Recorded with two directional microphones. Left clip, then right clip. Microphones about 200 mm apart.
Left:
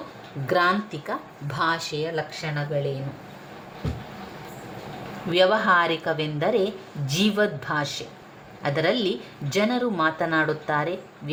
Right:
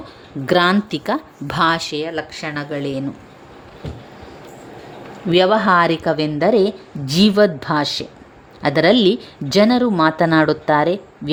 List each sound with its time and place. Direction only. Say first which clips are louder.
0.4 s speech: right 6 dB; 40° right (ahead or behind)
5.3 s speech: right 5 dB; 45° right (ahead or behind)